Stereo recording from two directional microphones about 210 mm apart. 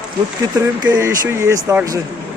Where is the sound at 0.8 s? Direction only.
15° right (ahead or behind).